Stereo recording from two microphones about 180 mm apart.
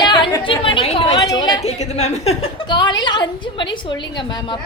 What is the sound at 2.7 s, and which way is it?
Speech, 25° left (ahead or behind).